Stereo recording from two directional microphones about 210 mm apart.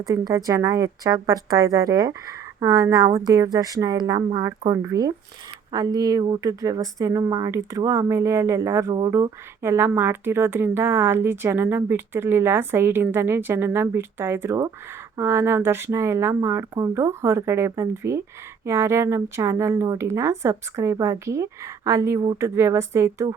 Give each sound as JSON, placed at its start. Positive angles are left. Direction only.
{"t": 0.0, "sound": "speech", "side_deg": -15}